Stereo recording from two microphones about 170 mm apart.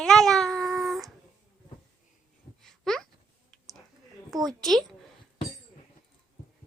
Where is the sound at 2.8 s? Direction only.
Centre (ahead or behind).